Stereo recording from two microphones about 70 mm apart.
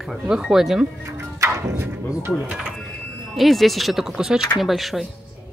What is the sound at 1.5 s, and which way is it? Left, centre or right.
Speech, right.